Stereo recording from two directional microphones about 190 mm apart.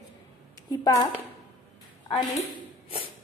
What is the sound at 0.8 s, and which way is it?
Speech, 20° left (ahead or behind).